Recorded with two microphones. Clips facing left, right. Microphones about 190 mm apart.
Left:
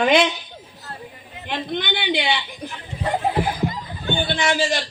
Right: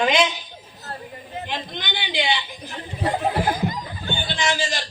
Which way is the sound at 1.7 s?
60° left (ahead or behind).